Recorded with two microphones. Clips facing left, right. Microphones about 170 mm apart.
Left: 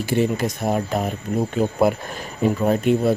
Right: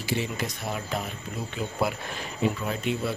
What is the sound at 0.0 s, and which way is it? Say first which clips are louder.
Speech: left 9 dB; 50° left (ahead or behind).